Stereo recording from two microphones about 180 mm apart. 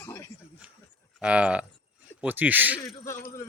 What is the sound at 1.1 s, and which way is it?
Speech, 5° right (ahead or behind).